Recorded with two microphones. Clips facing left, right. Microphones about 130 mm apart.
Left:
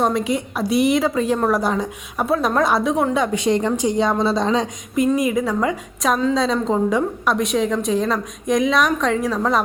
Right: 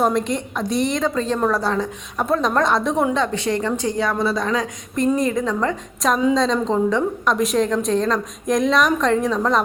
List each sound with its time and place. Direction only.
0.0 s a woman's voice: 5° left (ahead or behind)
3.3 s a woman's voice: 15° left (ahead or behind)
4.9 s a woman's voice: 10° left (ahead or behind)